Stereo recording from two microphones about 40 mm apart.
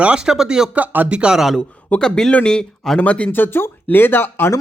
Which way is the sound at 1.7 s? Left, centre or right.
Left.